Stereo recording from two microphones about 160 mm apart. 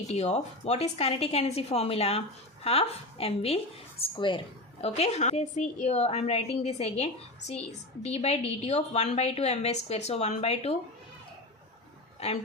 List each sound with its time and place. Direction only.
0.1 s a woman's voice: 45° left (ahead or behind)
12.2 s a woman's voice: 40° left (ahead or behind)